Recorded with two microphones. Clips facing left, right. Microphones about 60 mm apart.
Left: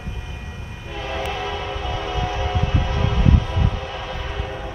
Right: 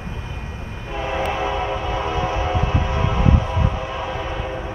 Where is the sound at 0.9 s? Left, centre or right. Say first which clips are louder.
Right 4 dB; right.